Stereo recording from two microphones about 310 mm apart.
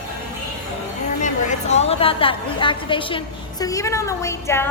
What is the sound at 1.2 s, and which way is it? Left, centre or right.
A woman's voice, left.